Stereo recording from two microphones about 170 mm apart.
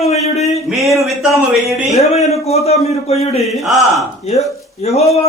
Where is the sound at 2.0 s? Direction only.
40° left (ahead or behind).